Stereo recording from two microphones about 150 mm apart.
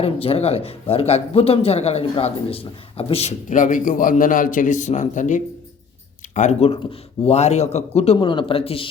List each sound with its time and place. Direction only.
0.0 s speech: 40° left (ahead or behind)
3.5 s a man's voice: 60° left (ahead or behind); by 8.9 s 40° left (ahead or behind)